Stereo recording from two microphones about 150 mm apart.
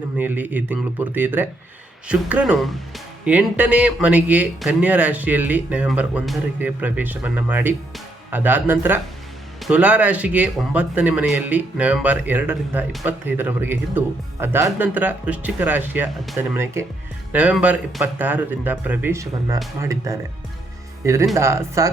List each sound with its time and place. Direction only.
0.2 s speech: 10° right (ahead or behind)